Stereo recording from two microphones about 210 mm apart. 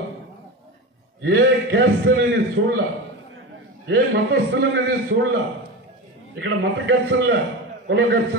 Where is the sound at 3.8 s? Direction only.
55° right (ahead or behind).